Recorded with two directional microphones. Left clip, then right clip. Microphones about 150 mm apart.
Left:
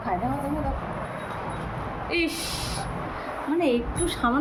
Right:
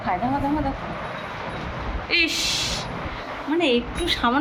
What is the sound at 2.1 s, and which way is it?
A woman's voice, 10° left (ahead or behind).